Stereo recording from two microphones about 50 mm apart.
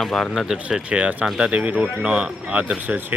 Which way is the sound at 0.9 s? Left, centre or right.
Right.